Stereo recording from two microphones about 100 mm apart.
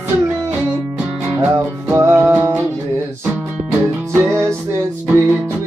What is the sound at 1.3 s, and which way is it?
Music, 25° right (ahead or behind).